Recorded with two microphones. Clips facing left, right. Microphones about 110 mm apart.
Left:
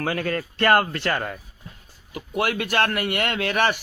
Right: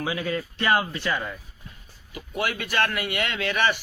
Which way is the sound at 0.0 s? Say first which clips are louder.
Left 2 dB; 55° left (ahead or behind).